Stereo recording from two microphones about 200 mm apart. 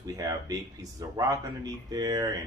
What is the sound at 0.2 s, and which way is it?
Speech, 20° right (ahead or behind).